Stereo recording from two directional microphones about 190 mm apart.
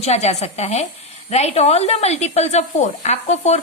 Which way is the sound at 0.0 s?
35° left (ahead or behind).